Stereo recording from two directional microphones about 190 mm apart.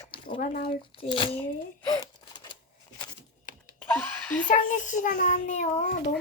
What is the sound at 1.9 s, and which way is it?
Gasp, 20° left (ahead or behind).